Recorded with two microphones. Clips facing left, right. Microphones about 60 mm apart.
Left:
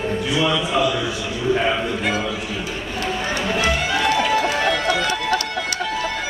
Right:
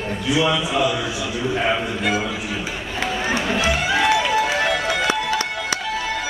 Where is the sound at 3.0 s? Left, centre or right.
Centre.